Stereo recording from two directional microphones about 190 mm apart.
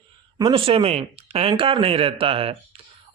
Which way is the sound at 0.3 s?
25° right (ahead or behind).